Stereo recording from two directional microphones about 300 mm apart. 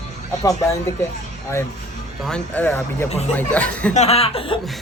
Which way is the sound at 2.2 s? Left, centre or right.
Centre.